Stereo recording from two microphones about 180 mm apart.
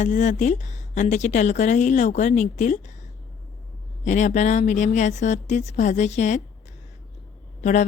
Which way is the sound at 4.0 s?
40° left (ahead or behind).